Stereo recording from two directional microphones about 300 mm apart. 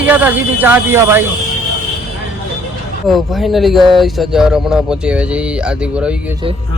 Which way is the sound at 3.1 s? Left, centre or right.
Centre.